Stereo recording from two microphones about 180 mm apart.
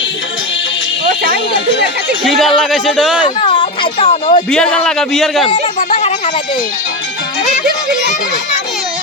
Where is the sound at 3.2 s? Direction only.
25° left (ahead or behind).